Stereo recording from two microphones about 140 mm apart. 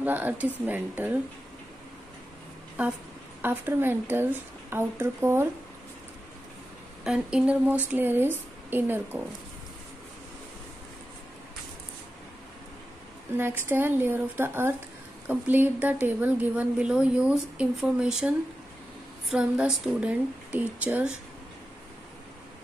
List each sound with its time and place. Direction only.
0.0 s a woman's voice: 15° right (ahead or behind)
3.4 s a woman's voice: 15° right (ahead or behind)
7.1 s a woman's voice: 5° right (ahead or behind)
13.4 s a woman's voice: 15° right (ahead or behind)
19.3 s a woman's voice: 5° right (ahead or behind)